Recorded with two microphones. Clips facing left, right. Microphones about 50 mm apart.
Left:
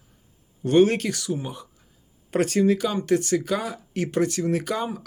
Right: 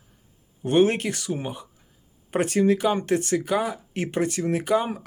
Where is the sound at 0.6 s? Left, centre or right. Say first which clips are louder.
Left 1 dB; right.